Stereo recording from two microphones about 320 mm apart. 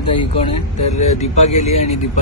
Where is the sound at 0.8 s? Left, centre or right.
Left.